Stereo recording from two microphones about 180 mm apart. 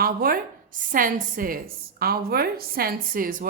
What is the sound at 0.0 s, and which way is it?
A woman's voice, 55° right (ahead or behind).